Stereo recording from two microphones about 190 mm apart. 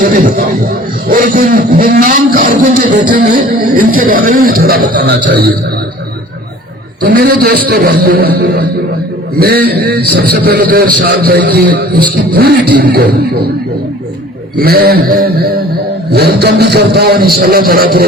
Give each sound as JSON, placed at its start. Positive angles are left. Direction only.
{"t": 0.0, "sound": "a man's voice", "side_deg": -45}
{"t": 7.0, "sound": "a man's voice", "side_deg": -55}
{"t": 9.4, "sound": "a man's voice", "side_deg": -55}
{"t": 14.6, "sound": "a man's voice", "side_deg": -55}